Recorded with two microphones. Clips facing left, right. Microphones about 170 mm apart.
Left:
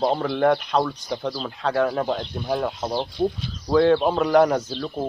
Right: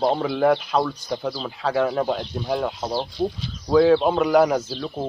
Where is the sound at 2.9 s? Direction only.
15° left (ahead or behind).